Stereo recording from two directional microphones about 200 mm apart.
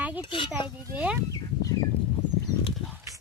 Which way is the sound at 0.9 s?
5° right (ahead or behind).